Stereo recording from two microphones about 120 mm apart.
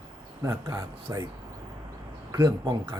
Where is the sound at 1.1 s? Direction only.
25° right (ahead or behind).